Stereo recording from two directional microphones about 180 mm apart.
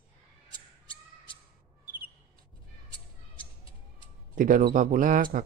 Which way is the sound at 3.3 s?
30° left (ahead or behind).